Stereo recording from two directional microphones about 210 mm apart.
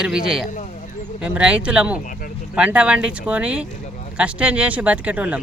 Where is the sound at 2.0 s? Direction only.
40° left (ahead or behind).